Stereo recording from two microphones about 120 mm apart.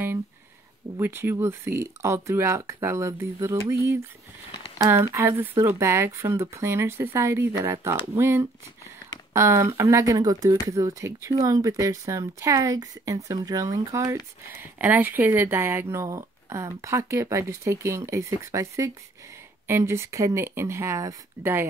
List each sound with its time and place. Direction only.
0.9 s speech: 20° right (ahead or behind)
14.5 s speech: 15° right (ahead or behind)